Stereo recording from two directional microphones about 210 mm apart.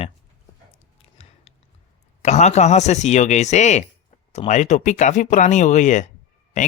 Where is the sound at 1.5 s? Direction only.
30° left (ahead or behind).